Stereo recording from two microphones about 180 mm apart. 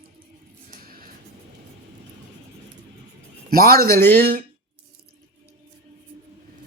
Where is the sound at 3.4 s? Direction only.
55° right (ahead or behind).